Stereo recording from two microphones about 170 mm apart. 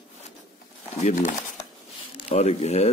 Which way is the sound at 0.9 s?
45° left (ahead or behind).